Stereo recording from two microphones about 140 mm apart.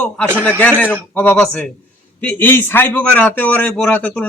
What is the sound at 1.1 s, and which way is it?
A man's voice, 10° left (ahead or behind).